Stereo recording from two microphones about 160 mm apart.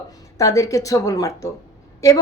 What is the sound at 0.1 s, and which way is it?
A woman's voice, 20° left (ahead or behind).